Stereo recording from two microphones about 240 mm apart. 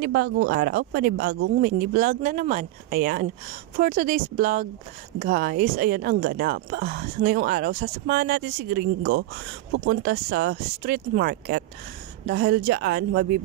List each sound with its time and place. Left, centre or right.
0.0 s speech: right